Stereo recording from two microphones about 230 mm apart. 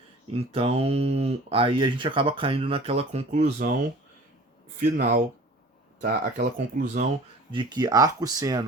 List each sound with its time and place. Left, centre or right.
0.3 s speech: right
4.8 s speech: right
7.5 s speech: centre